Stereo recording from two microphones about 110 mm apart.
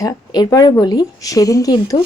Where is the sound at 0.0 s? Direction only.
35° left (ahead or behind).